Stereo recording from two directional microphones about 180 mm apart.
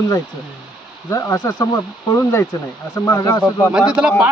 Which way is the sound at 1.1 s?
20° left (ahead or behind).